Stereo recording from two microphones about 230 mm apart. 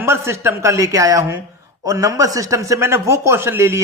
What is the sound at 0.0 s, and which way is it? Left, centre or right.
Speech, centre.